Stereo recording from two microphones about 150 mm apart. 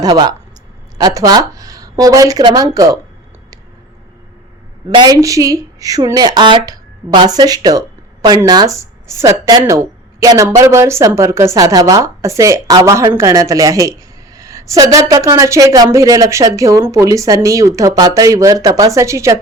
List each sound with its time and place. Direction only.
0.0 s a woman's voice: 25° right (ahead or behind)
4.9 s a woman's voice: 25° right (ahead or behind)